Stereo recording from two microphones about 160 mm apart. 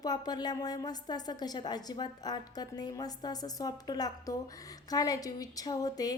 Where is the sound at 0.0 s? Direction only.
25° left (ahead or behind).